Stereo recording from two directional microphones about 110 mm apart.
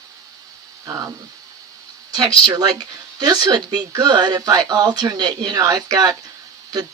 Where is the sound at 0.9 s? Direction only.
30° right (ahead or behind).